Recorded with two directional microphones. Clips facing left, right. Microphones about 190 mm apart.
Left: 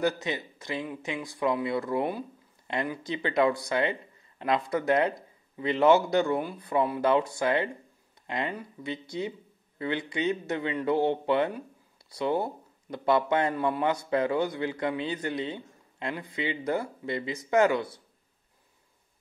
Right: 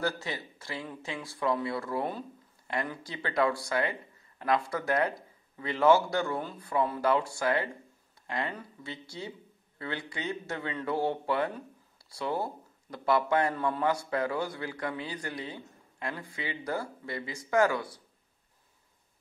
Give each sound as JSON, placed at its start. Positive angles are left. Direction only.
{"t": 0.0, "sound": "a man's voice", "side_deg": 20}